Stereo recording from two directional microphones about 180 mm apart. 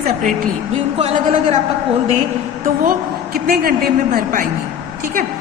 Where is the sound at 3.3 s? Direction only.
55° right (ahead or behind).